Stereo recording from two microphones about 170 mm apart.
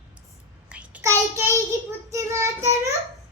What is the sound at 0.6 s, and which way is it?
Child singing, 5° right (ahead or behind).